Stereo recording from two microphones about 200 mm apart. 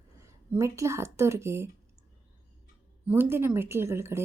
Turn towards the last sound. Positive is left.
turn(degrees=-15)  # may be behind; listen again after turning